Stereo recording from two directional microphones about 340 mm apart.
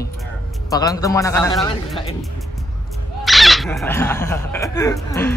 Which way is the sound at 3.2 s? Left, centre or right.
Centre.